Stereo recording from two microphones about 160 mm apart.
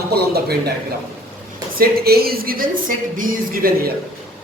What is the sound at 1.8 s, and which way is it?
Speech, 70° right (ahead or behind).